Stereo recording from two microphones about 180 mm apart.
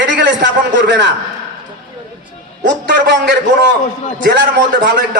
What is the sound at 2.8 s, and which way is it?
Speech, 75° right (ahead or behind).